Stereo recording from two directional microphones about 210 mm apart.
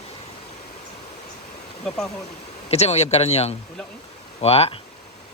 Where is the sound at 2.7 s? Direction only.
30° left (ahead or behind).